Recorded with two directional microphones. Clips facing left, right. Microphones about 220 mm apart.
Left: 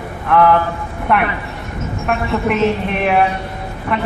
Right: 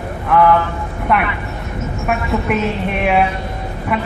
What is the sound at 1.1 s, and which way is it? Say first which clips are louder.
Speech: left 1 dB; centre (ahead or behind).